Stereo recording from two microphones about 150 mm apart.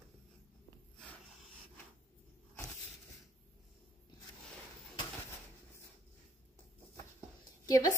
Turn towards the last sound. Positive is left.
turn(degrees=25)  # may be behind; listen again after turning